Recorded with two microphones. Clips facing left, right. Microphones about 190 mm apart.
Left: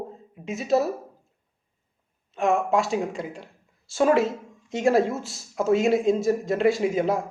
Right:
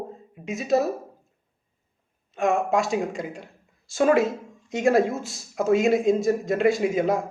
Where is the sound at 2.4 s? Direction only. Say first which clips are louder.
Even; 15° right (ahead or behind).